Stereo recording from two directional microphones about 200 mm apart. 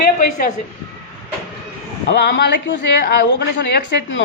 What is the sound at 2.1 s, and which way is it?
Speech, 55° left (ahead or behind).